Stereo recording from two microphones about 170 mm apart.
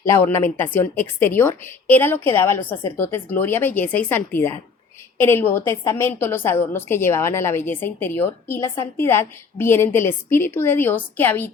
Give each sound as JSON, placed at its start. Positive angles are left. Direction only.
{"t": 0.0, "sound": "a woman's voice", "side_deg": 15}